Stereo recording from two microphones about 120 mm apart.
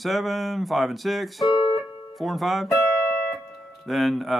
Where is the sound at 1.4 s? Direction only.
35° left (ahead or behind).